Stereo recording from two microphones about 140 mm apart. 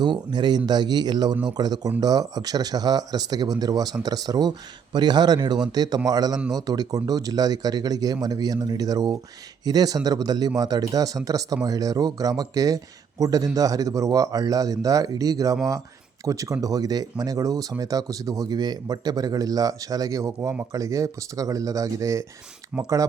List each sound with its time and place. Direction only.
0.0 s speech: 30° right (ahead or behind)